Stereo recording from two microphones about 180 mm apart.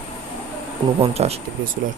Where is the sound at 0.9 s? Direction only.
35° right (ahead or behind).